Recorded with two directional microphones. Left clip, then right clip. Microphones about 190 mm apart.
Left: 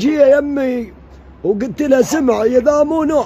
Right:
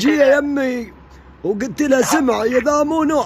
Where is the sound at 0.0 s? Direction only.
Centre (ahead or behind).